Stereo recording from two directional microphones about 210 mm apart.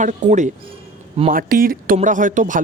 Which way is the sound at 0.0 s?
35° right (ahead or behind).